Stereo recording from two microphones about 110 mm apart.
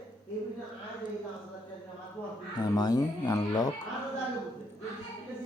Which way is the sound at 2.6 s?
35° left (ahead or behind).